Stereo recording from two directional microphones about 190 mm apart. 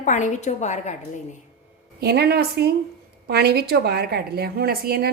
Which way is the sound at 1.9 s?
55° right (ahead or behind).